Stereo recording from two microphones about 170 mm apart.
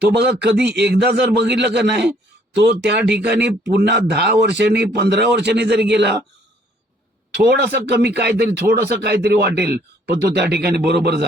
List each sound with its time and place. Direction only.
0.2 s a man's voice: 80° right
0.5 s speech: 5° right (ahead or behind)
0.8 s a man's voice: 75° right (ahead or behind)
7.5 s speech: 75° right (ahead or behind)